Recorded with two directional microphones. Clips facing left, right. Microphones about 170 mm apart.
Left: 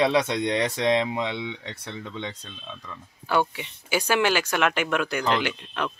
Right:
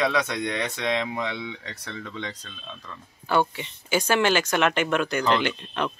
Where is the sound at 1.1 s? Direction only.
20° left (ahead or behind).